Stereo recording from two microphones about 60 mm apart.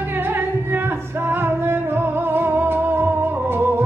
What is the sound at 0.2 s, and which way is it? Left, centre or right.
Music, right.